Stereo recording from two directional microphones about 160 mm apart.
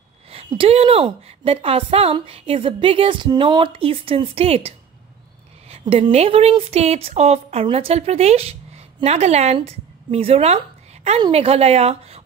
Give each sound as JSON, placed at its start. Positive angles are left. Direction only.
{"t": 0.3, "sound": "speech", "side_deg": -35}